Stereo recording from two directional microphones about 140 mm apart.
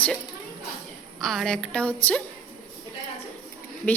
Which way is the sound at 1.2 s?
Centre (ahead or behind).